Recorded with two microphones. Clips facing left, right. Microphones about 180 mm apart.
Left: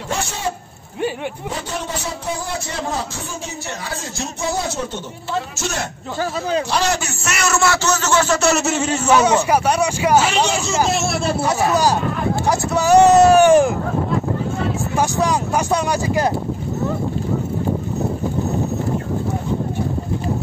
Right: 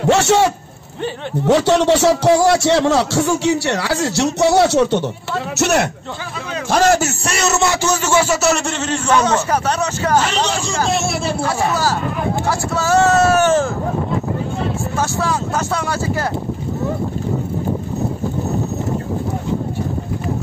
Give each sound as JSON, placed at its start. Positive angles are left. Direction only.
{"t": 0.0, "sound": "speech", "side_deg": -75}
{"t": 1.5, "sound": "a man's voice", "side_deg": -80}
{"t": 6.7, "sound": "speech", "side_deg": -45}
{"t": 7.2, "sound": "a man's voice", "side_deg": -25}
{"t": 11.4, "sound": "speech", "side_deg": 20}
{"t": 15.0, "sound": "speech", "side_deg": 15}